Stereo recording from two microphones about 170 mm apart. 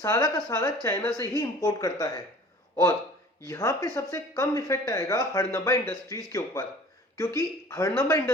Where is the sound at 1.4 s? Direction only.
20° left (ahead or behind).